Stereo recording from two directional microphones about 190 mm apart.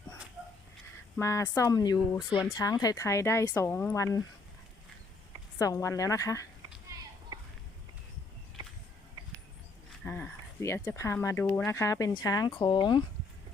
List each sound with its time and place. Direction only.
1.1 s speech: 15° left (ahead or behind)
5.5 s speech: 15° left (ahead or behind)
10.0 s speech: 10° left (ahead or behind); by 13.0 s 25° left (ahead or behind)